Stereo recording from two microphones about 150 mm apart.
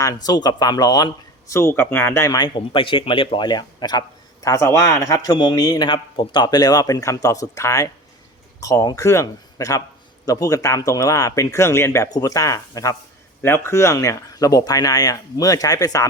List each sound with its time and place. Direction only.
0.0 s speech: 25° left (ahead or behind)
2.6 s speech: 35° left (ahead or behind)